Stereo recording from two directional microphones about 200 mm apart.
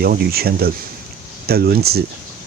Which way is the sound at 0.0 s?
50° right (ahead or behind).